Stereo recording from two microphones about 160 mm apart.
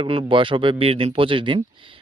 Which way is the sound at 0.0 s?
35° right (ahead or behind).